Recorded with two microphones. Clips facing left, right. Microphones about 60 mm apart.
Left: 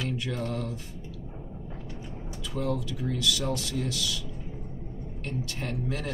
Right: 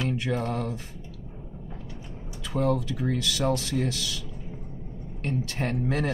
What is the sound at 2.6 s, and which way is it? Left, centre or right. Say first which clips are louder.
Speech: right 5 dB; right.